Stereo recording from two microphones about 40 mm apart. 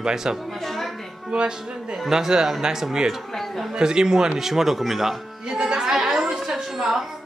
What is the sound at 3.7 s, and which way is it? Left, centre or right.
Speech, centre.